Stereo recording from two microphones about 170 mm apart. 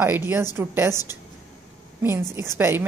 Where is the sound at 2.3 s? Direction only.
15° right (ahead or behind).